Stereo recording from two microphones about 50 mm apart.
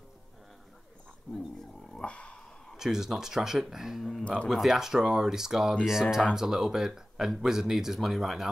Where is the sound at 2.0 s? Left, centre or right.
Left.